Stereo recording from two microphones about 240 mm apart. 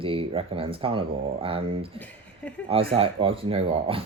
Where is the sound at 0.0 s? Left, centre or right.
Right.